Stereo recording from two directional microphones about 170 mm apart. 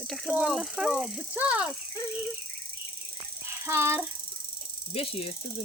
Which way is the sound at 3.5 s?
15° right (ahead or behind).